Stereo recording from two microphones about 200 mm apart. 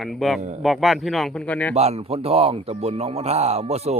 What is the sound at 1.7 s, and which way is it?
A man's voice, 30° right (ahead or behind).